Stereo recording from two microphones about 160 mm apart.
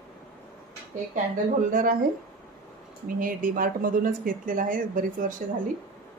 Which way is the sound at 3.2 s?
60° right (ahead or behind).